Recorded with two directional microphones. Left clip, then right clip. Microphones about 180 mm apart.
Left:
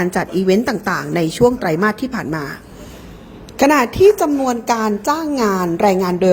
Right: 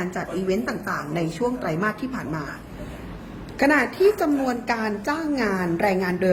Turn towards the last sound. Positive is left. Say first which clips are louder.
# left 7 dB
turn(degrees=40)  # may be behind; listen again after turning